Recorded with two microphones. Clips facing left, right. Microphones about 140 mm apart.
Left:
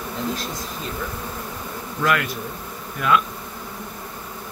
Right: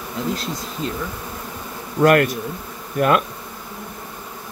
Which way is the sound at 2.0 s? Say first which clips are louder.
Right 8 dB; 50° right (ahead or behind).